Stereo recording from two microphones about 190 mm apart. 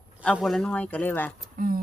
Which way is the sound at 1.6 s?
45° right (ahead or behind).